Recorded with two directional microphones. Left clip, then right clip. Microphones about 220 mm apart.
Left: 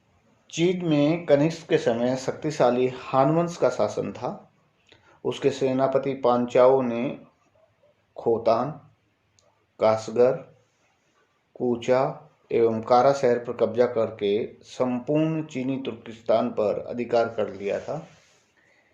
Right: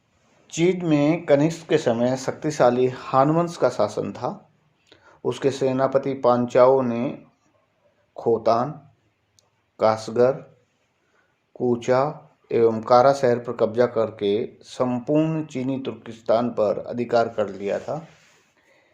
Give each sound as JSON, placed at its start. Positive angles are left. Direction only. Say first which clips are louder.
{"t": 0.4, "sound": "speech", "louder": "right 3 dB", "side_deg": -25}
{"t": 9.3, "sound": "clicking", "louder": "right 2 dB", "side_deg": -25}
{"t": 11.5, "sound": "speech", "louder": "right 2 dB", "side_deg": -25}